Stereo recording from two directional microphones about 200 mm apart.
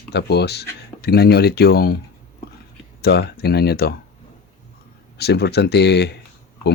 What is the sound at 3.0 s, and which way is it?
Speech, 55° left (ahead or behind).